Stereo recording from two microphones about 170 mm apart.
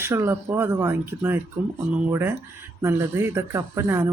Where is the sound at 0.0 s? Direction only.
15° right (ahead or behind).